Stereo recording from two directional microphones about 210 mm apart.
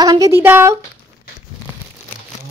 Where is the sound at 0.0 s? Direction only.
15° right (ahead or behind).